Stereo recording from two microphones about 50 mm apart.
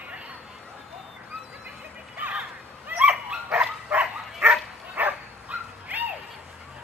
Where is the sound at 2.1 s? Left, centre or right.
Right.